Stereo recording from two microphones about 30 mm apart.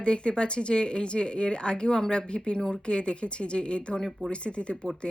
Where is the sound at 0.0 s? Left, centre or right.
Left.